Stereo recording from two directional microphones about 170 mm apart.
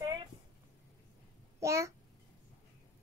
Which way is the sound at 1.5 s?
15° right (ahead or behind).